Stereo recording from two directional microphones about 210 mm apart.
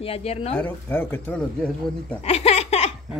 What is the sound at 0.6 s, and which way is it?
Speech, 5° left (ahead or behind).